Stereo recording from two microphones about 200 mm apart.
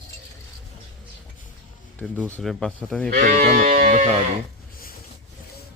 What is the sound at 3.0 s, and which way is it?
Sheep, 45° right (ahead or behind).